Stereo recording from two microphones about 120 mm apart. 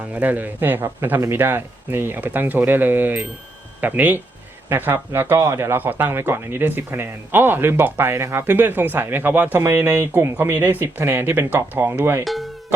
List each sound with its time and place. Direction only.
0.1 s speech: 15° right (ahead or behind)
12.2 s speech: centre (ahead or behind)